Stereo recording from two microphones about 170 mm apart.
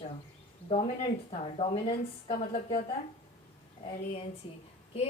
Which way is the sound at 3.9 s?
35° left (ahead or behind).